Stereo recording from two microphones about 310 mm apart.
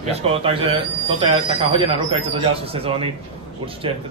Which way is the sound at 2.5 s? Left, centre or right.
Centre.